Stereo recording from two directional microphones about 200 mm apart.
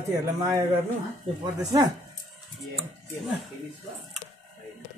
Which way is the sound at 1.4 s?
20° right (ahead or behind).